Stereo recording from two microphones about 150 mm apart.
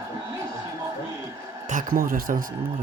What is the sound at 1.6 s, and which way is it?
Speech, 60° right (ahead or behind).